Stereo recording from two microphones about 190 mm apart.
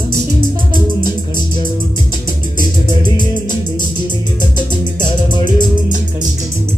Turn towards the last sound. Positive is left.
turn(degrees=25)  # may be behind; listen again after turning